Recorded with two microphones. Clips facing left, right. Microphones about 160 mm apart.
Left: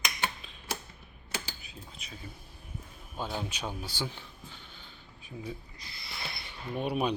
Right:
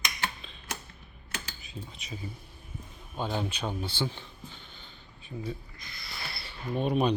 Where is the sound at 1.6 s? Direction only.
Centre (ahead or behind).